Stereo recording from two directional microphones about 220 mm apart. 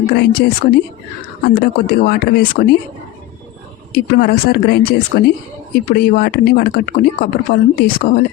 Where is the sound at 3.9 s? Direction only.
45° left (ahead or behind).